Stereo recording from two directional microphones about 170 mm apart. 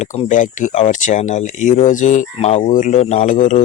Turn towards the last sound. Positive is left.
turn(degrees=50)  # may be behind; listen again after turning